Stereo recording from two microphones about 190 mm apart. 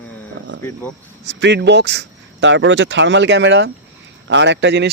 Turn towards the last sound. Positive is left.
turn(degrees=-65)  # may be behind; listen again after turning